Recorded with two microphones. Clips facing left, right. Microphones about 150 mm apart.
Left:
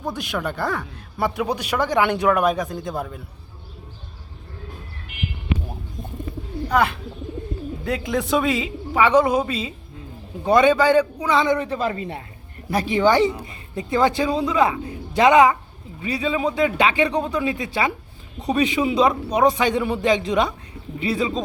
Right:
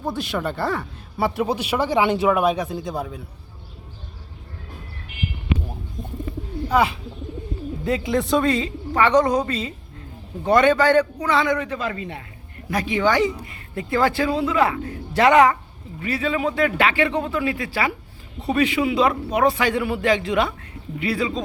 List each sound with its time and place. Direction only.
0.0 s speech: centre (ahead or behind)
6.7 s a man's voice: 5° right (ahead or behind); by 13.3 s 30° left (ahead or behind)
13.4 s a man's voice: 20° left (ahead or behind)